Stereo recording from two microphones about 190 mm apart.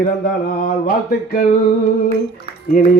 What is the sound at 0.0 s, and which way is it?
Mantra, 50° left (ahead or behind).